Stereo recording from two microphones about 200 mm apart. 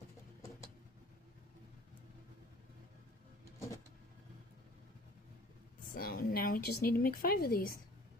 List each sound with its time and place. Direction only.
5.9 s a woman's voice: 45° left (ahead or behind)